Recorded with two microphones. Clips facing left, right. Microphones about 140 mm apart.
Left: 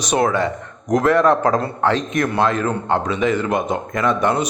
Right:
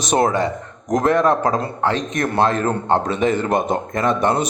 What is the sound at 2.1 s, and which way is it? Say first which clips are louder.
Speech: even; 35° right (ahead or behind).